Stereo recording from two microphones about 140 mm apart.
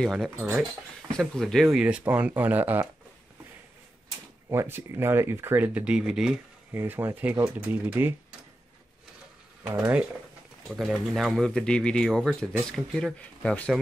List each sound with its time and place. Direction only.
0.0 s speech: centre (ahead or behind)
4.5 s speech: 15° right (ahead or behind)
6.7 s speech: 15° right (ahead or behind)
9.7 s speech: 15° right (ahead or behind)
10.7 s speech: centre (ahead or behind)